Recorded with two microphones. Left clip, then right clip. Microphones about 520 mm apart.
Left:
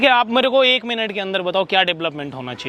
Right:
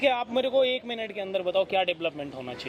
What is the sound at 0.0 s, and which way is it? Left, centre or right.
Speech, left.